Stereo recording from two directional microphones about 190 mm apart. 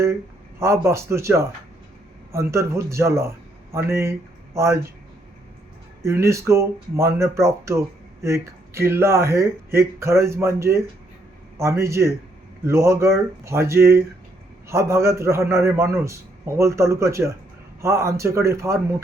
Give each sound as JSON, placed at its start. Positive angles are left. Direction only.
{"t": 0.6, "sound": "speech", "side_deg": -15}
{"t": 6.0, "sound": "speech", "side_deg": -15}